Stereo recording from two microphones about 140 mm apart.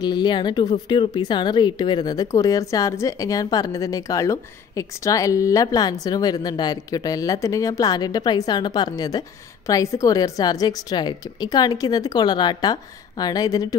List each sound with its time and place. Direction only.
0.0 s speech: 30° left (ahead or behind)